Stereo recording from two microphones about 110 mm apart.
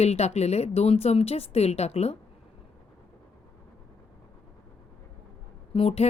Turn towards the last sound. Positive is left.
turn(degrees=60)  # may be behind; listen again after turning